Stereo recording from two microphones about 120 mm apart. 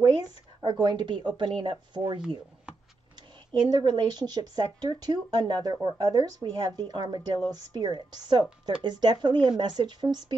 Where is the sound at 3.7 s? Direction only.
35° right (ahead or behind).